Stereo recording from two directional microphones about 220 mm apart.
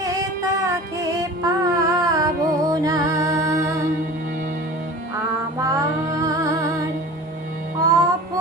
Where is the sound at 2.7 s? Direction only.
15° right (ahead or behind).